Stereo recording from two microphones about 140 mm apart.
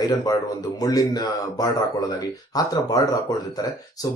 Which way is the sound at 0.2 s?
25° left (ahead or behind).